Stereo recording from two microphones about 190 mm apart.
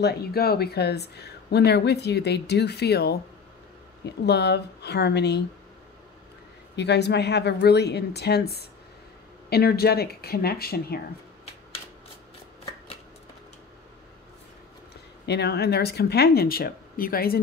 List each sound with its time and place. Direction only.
0.0 s speech: 55° left (ahead or behind)
6.8 s speech: 60° left (ahead or behind)
15.2 s speech: 60° left (ahead or behind)